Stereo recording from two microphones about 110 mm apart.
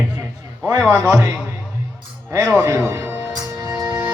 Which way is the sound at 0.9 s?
25° right (ahead or behind).